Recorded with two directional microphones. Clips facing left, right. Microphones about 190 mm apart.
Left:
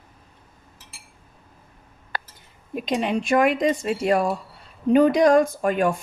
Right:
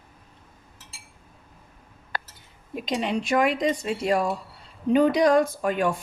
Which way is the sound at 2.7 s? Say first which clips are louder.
Left 3 dB; 50° left (ahead or behind).